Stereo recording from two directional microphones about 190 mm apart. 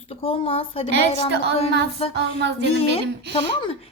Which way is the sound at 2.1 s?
65° right (ahead or behind).